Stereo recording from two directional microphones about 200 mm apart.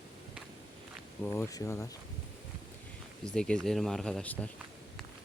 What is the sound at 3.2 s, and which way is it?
Speech, 5° left (ahead or behind).